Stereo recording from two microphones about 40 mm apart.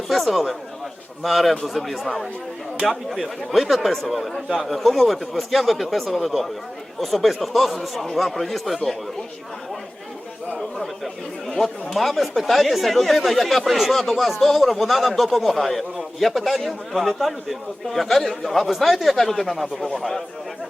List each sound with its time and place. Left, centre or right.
0.1 s speech: centre
10.8 s a man's voice: centre